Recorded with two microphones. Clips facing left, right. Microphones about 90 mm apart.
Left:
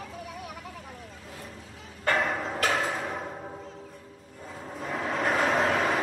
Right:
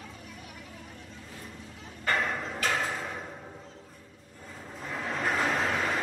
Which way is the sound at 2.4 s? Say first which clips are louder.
Left 3 dB; 35° left (ahead or behind).